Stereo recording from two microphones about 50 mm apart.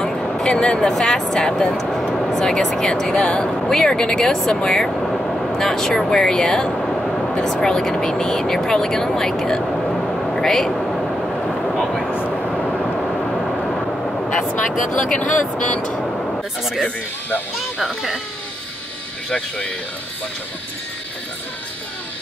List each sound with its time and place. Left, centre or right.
0.0 s speech: centre
4.6 s vehicle: centre
7.5 s speech: centre
11.8 s a sound: centre
12.1 s vehicle: left
13.0 s vehicle: centre
15.0 s speech: left
17.7 s speech: centre
19.2 s speech: centre